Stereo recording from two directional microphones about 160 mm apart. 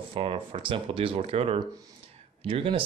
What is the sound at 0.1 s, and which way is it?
Speech, 35° right (ahead or behind).